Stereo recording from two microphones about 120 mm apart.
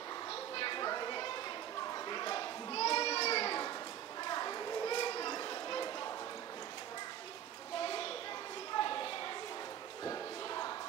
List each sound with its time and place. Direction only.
0.3 s children playing: 45° left (ahead or behind)
4.2 s children playing: 35° left (ahead or behind)
7.8 s a sound: 45° left (ahead or behind)